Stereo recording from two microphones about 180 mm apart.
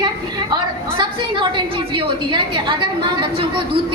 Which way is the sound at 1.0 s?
25° right (ahead or behind).